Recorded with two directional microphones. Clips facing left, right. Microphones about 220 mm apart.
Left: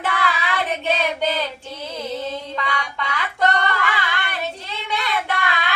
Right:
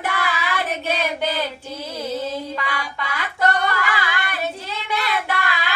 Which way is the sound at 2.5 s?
5° right (ahead or behind).